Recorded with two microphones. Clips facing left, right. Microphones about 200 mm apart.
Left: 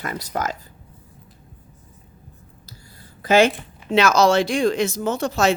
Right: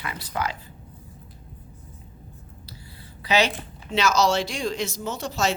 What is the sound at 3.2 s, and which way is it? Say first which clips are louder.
Speech: left 7 dB; 50° left (ahead or behind).